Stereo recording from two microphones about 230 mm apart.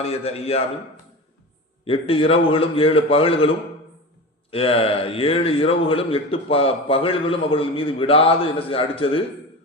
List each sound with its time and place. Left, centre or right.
0.0 s a man's voice: left
1.8 s a man's voice: left
4.5 s a man's voice: left